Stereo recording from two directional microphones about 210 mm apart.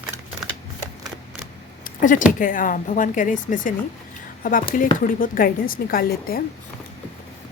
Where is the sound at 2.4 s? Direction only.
40° left (ahead or behind).